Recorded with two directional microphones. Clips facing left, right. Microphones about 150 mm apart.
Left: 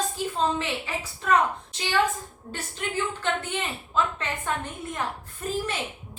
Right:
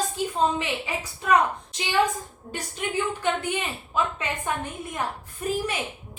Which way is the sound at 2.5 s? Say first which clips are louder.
Right 2 dB; 15° right (ahead or behind).